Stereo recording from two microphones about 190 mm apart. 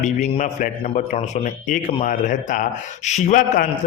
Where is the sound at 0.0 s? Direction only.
40° left (ahead or behind).